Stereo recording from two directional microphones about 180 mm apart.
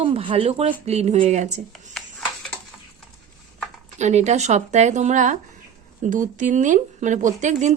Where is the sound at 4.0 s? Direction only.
40° right (ahead or behind).